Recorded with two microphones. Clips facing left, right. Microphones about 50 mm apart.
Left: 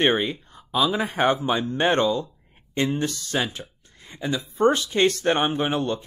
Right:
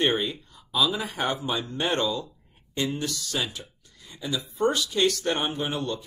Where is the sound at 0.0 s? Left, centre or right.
Left.